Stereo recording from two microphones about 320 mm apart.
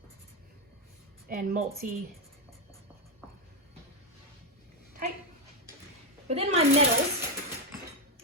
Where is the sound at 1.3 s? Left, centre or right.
Right.